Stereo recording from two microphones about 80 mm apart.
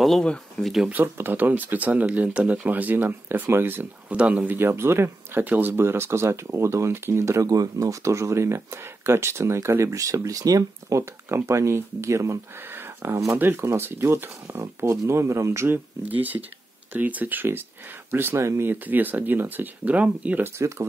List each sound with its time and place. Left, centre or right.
0.0 s speech: centre
1.0 s speech: right
16.1 s speech: right
20.4 s speech: right